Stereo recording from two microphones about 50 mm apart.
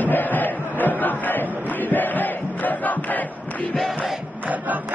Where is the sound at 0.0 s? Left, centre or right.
Left.